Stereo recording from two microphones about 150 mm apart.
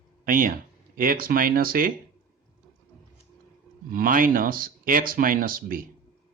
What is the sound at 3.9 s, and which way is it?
Speech, 65° right (ahead or behind).